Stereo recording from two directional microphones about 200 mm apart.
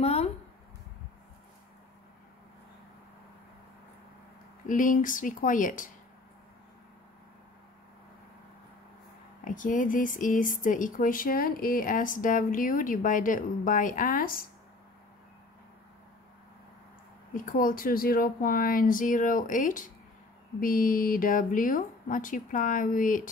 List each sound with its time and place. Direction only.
0.0 s a sound: 30° left (ahead or behind)
4.6 s speech: 40° left (ahead or behind)
9.4 s speech: 40° left (ahead or behind)
17.3 s speech: 40° left (ahead or behind)